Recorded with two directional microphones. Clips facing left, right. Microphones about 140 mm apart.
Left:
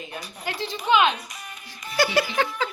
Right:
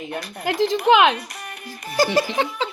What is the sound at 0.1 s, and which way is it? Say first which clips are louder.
Speech: right 10 dB; 65° right (ahead or behind).